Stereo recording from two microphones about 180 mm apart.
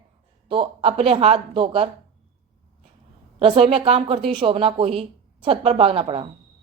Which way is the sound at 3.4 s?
30° right (ahead or behind).